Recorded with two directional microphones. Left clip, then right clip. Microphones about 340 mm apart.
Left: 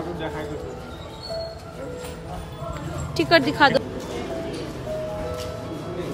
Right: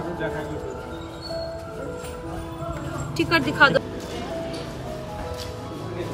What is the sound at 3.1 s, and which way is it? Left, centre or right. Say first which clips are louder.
Speech: left 1 dB; left.